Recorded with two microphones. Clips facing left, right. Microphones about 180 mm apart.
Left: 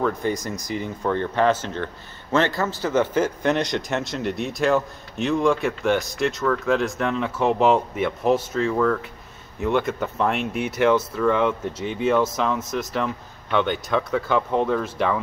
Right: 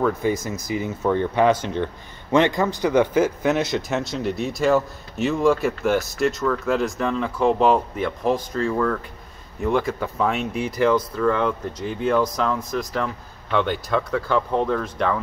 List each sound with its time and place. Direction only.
0.0 s speech: 5° right (ahead or behind)
10.4 s speech: 30° right (ahead or behind)
10.9 s speech: 5° left (ahead or behind)